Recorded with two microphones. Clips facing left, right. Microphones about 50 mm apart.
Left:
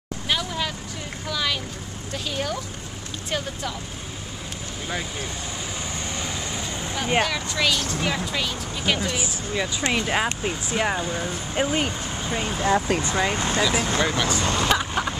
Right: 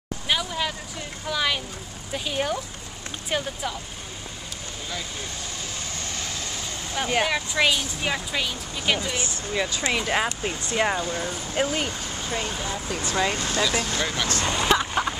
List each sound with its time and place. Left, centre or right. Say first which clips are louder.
0.3 s vehicle: even; centre
1.3 s speech: right 1 dB; centre
6.1 s vehicle: left 3 dB; centre
7.2 s speech: right 2 dB; centre
8.3 s speech: left 1 dB; centre
12.6 s speech: left 9 dB; left
13.1 s speech: left 2 dB; centre
14.4 s vehicle: right 4 dB; centre